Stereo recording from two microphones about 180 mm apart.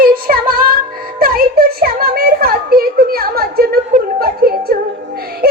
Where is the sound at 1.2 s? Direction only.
55° right (ahead or behind).